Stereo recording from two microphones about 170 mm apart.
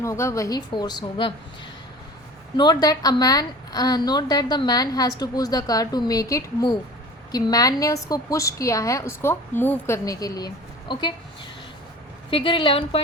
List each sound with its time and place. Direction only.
0.0 s a woman's voice: 15° left (ahead or behind)
2.6 s a woman's voice: 25° left (ahead or behind)
12.3 s a woman's voice: 30° left (ahead or behind)